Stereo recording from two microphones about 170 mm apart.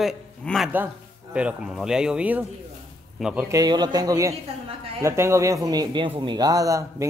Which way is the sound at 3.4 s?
20° right (ahead or behind).